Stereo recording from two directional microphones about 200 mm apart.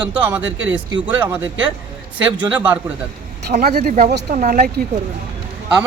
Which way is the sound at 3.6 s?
50° right (ahead or behind).